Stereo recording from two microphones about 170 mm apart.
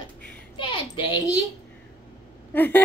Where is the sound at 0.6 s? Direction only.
30° left (ahead or behind).